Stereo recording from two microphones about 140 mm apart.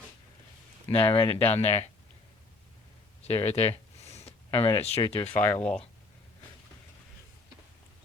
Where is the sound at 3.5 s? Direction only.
50° left (ahead or behind).